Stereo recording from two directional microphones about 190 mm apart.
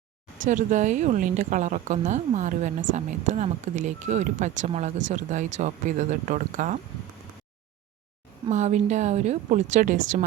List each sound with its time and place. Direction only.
0.4 s a woman's voice: 40° right (ahead or behind)
8.4 s a woman's voice: 35° right (ahead or behind)